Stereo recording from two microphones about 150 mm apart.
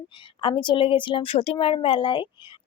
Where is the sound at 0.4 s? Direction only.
30° left (ahead or behind).